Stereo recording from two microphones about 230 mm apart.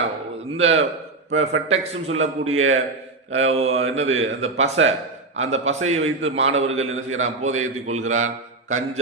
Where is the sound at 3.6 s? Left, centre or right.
Right.